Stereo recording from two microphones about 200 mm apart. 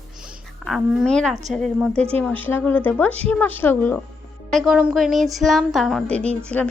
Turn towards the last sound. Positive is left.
turn(degrees=5)  # may be behind; listen again after turning